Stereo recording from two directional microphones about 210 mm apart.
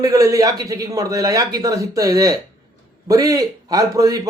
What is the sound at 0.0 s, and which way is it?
A man's voice, 15° right (ahead or behind).